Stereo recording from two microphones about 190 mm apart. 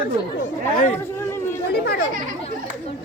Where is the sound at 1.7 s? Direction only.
60° left (ahead or behind).